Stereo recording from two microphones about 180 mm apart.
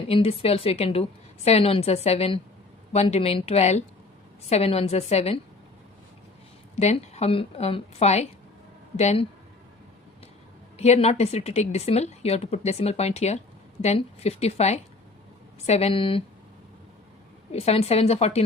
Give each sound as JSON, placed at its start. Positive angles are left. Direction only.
{"t": 0.1, "sound": "a woman's voice", "side_deg": 35}
{"t": 6.7, "sound": "a woman's voice", "side_deg": 35}
{"t": 10.8, "sound": "a woman's voice", "side_deg": 35}
{"t": 17.5, "sound": "a woman's voice", "side_deg": 35}